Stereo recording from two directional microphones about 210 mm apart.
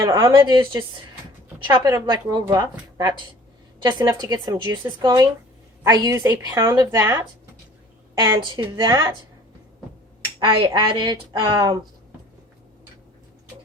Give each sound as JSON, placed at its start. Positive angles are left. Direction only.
{"t": 0.0, "sound": "a woman's voice", "side_deg": -15}
{"t": 10.4, "sound": "a woman's voice", "side_deg": -25}